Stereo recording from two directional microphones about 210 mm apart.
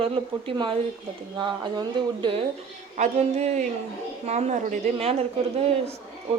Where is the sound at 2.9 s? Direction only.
35° right (ahead or behind).